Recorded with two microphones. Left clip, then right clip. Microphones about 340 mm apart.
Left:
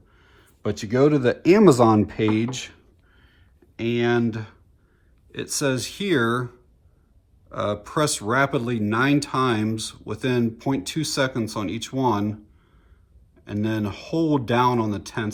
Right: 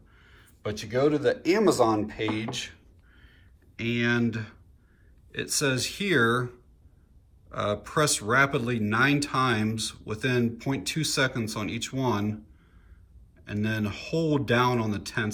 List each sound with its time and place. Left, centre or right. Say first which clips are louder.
0.1 s speech: left 1 dB; centre
13.4 s speech: left 4 dB; centre